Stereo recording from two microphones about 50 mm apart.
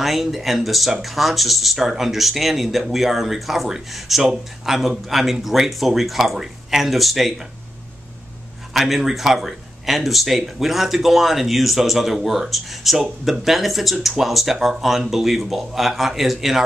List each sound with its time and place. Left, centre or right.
0.0 s speech: centre
8.7 s speech: centre